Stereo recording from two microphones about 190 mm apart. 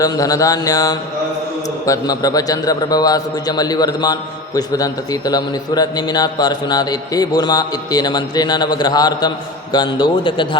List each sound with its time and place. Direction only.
0.0 s a man's voice: 20° left (ahead or behind)